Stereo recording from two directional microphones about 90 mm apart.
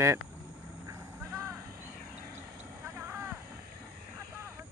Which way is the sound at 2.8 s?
25° right (ahead or behind).